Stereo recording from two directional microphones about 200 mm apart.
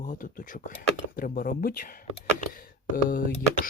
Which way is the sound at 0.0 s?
40° left (ahead or behind).